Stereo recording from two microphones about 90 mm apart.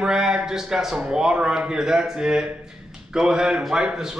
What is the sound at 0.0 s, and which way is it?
A man's voice, 10° right (ahead or behind).